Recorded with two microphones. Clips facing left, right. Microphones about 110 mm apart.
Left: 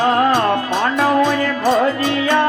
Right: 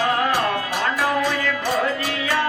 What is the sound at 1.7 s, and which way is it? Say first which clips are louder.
Music: left 8 dB; 25° left (ahead or behind).